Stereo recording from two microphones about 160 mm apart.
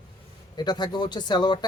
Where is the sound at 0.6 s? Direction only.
25° left (ahead or behind).